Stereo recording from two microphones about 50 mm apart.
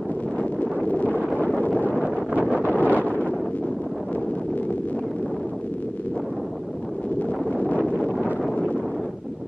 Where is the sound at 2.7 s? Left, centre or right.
Left.